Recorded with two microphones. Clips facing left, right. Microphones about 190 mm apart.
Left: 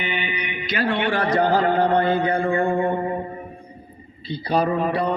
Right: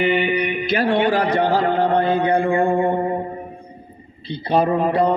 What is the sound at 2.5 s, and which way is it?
Speech, 30° right (ahead or behind).